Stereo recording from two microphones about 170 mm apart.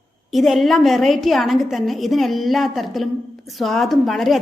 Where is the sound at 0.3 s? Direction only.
Centre (ahead or behind).